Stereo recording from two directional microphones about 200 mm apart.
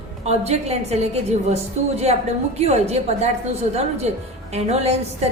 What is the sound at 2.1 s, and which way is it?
Speech, 30° right (ahead or behind).